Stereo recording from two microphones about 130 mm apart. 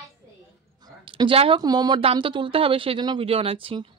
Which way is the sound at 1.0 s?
40° right (ahead or behind).